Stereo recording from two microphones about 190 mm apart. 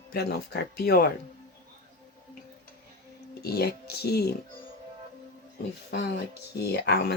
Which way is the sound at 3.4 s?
55° left (ahead or behind).